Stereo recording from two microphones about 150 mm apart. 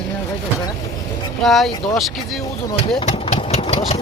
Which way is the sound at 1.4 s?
Centre (ahead or behind).